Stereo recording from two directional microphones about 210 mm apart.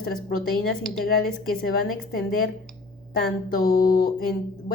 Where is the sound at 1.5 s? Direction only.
45° left (ahead or behind).